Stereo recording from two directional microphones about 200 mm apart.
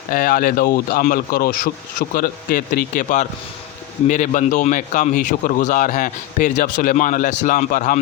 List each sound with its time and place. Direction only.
0.1 s a man's voice: 45° left (ahead or behind)